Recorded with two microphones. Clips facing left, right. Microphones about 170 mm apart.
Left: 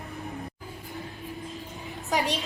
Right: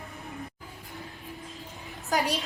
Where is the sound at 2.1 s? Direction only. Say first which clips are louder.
Even; centre (ahead or behind).